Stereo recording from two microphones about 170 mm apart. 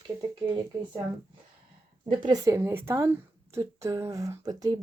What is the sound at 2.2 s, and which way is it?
A woman's voice, 20° right (ahead or behind).